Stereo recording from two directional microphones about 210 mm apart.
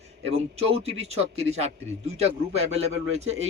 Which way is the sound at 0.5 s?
30° right (ahead or behind).